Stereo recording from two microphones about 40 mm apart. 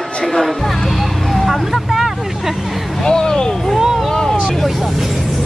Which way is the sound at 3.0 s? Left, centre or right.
Centre.